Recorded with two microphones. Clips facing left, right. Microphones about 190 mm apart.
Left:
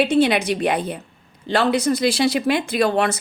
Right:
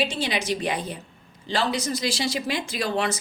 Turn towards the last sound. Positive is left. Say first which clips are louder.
# left 7 dB
turn(degrees=60)  # may be behind; listen again after turning